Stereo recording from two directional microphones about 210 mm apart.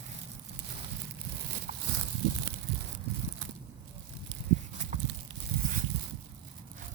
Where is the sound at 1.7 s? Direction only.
35° right (ahead or behind).